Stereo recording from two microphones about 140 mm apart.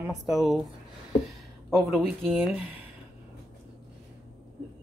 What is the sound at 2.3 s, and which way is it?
Speech, 10° right (ahead or behind).